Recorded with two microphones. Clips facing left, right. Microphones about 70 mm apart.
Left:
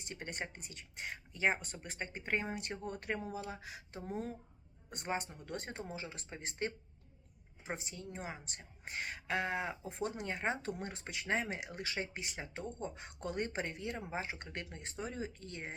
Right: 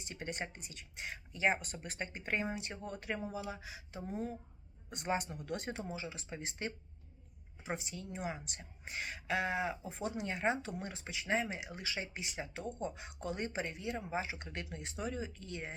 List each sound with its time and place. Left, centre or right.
0.0 s speech: left
2.6 s a woman's voice: left
5.0 s speech: left
7.8 s a woman's voice: left